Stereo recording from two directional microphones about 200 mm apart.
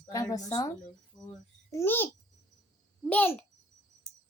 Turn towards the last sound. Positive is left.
turn(degrees=10)  # may be behind; listen again after turning